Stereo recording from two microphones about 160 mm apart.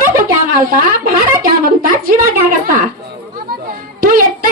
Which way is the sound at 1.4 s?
60° right (ahead or behind).